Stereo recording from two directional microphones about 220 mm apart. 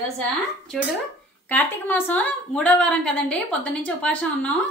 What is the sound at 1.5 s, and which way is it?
Speech, 5° left (ahead or behind).